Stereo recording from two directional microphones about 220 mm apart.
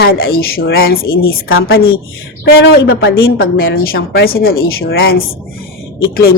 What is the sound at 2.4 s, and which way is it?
Speech, 50° left (ahead or behind).